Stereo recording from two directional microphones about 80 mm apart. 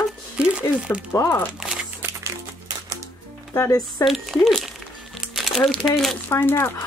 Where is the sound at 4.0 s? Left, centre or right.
Centre.